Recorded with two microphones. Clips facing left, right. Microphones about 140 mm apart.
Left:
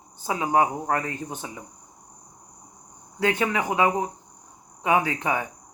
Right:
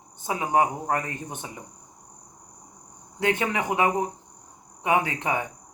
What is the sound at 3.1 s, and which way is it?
Cricket, 25° right (ahead or behind).